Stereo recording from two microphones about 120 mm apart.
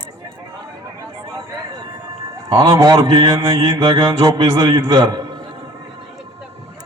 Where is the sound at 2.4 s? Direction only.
35° right (ahead or behind).